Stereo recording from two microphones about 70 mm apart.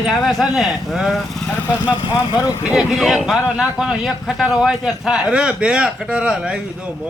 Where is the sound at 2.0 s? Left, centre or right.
Left.